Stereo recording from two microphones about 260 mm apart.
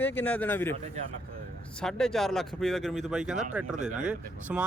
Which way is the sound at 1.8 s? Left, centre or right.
Centre.